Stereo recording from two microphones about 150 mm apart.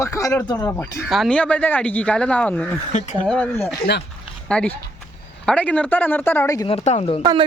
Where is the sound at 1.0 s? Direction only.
Centre (ahead or behind).